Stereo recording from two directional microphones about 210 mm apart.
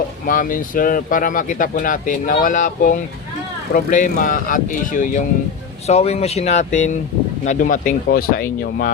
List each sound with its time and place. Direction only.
0.3 s speech: 40° left (ahead or behind)